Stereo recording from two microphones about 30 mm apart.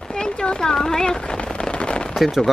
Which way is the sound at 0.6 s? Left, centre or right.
Centre.